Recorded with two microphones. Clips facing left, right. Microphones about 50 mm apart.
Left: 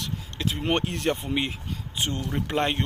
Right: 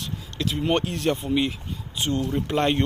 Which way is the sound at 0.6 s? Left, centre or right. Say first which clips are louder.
Right 2 dB; left.